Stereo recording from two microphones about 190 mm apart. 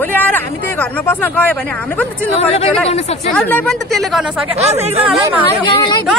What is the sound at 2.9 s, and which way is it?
Speech, 35° left (ahead or behind).